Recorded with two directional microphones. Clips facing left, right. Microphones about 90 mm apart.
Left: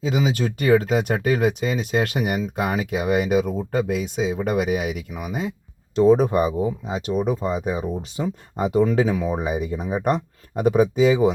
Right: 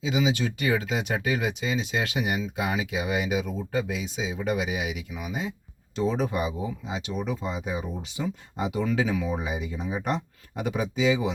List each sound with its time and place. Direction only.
0.0 s speech: 45° left (ahead or behind)